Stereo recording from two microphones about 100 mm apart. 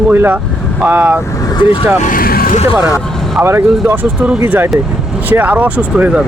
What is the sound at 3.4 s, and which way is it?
Speech, 25° right (ahead or behind).